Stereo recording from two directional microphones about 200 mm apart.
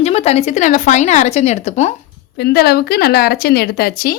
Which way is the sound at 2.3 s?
55° left (ahead or behind).